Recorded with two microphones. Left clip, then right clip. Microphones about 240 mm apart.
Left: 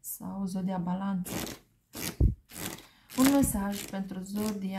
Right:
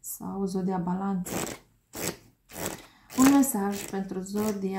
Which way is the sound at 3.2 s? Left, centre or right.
Left.